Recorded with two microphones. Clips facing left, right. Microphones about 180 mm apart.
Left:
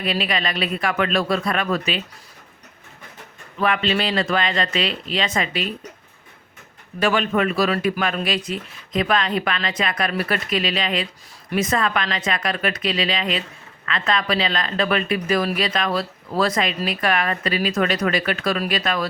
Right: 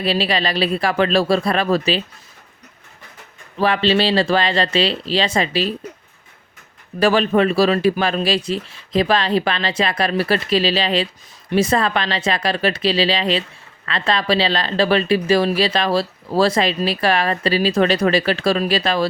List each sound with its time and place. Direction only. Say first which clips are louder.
0.0 s speech: right 4 dB; 30° right (ahead or behind)
3.6 s speech: right 4 dB; 30° right (ahead or behind)
7.0 s speech: right 5 dB; 35° right (ahead or behind)